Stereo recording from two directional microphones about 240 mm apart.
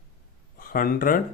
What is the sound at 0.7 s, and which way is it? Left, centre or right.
Speech, left.